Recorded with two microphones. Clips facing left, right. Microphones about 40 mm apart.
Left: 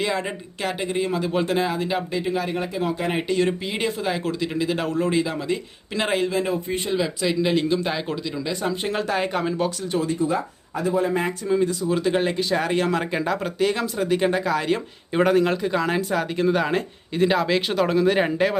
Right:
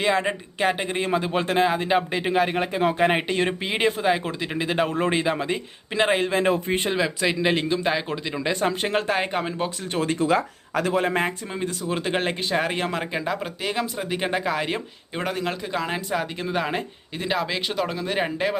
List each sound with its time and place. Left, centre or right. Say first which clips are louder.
0.0 s speech: right 3 dB; right
5.9 s speech: right 2 dB; centre
6.4 s speech: right 3 dB; right
6.9 s speech: left 1 dB; right
7.7 s speech: even; centre
8.4 s speech: right 3 dB; right
9.9 s speech: right 2 dB; right
10.2 s speech: right 2 dB; right
11.3 s speech: left 7 dB; right
11.7 s speech: left 4 dB; right
13.0 s speech: left 3 dB; centre
15.1 s speech: left 8 dB; centre